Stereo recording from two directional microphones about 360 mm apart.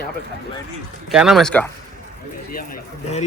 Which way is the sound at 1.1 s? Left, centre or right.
Centre.